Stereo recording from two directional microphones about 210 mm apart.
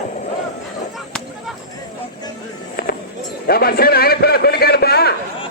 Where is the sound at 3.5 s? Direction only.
45° left (ahead or behind).